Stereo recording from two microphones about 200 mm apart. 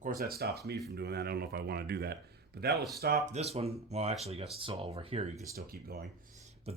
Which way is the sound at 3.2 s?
35° right (ahead or behind).